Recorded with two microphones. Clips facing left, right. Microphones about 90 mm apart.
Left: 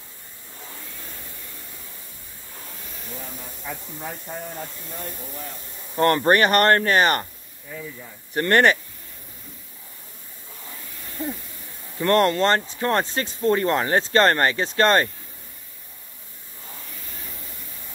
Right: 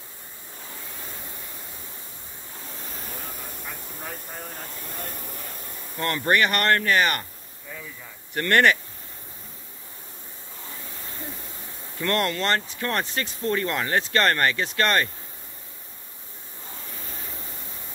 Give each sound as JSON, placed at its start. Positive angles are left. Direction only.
{"t": 5.9, "sound": "speech", "side_deg": 40}
{"t": 8.4, "sound": "speech", "side_deg": 25}
{"t": 12.0, "sound": "speech", "side_deg": 25}